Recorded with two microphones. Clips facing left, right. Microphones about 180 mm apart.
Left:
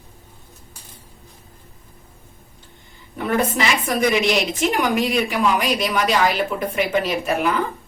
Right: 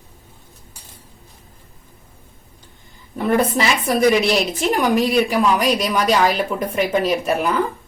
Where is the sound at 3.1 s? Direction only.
35° right (ahead or behind).